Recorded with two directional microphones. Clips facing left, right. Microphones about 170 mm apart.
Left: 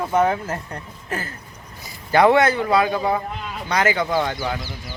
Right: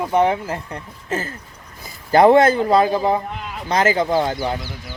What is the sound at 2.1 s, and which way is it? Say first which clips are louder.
A man's voice: right 3 dB; 30° right (ahead or behind).